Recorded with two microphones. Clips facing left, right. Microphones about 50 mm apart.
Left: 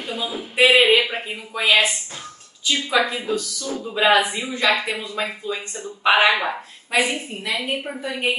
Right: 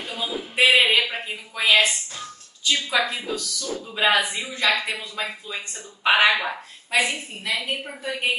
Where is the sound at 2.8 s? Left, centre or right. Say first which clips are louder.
Left 6 dB; left.